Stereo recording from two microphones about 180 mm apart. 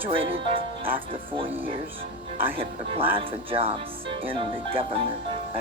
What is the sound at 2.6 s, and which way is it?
Speech, 30° right (ahead or behind).